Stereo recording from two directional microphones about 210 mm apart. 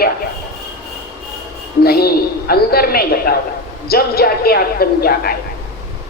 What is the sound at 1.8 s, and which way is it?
A woman's voice, 45° left (ahead or behind).